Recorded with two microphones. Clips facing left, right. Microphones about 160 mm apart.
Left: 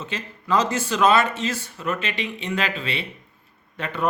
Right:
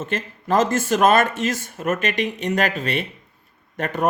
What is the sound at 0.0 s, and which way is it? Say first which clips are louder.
Speech: right 5 dB; 50° right (ahead or behind).